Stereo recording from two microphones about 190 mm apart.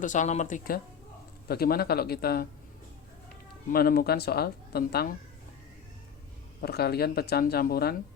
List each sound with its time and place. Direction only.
0.0 s a man's voice: 40° left (ahead or behind)
3.7 s speech: 50° left (ahead or behind)
6.6 s speech: 55° left (ahead or behind)